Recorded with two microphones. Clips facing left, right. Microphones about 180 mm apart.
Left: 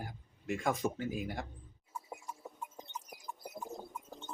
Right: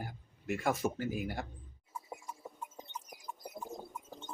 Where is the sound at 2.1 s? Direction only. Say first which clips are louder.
Right 1 dB; 5° right (ahead or behind).